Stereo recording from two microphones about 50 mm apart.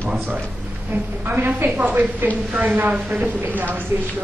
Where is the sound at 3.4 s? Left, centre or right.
Right.